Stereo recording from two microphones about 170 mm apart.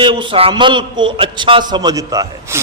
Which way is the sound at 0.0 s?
30° right (ahead or behind).